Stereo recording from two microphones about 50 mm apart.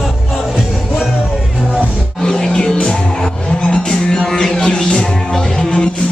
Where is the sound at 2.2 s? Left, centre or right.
Centre.